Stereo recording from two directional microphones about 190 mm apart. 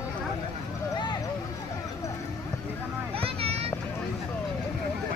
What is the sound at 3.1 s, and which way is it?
Vehicle, 30° right (ahead or behind).